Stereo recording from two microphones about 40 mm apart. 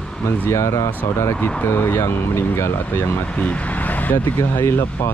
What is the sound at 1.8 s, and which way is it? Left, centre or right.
Speech, left.